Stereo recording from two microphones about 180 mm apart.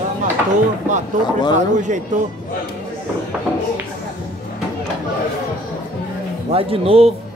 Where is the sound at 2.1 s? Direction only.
45° right (ahead or behind).